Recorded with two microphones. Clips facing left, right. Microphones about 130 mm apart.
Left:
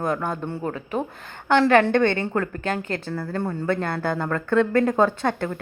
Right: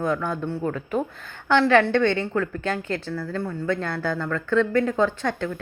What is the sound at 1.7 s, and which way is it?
A woman's voice, 50° left (ahead or behind).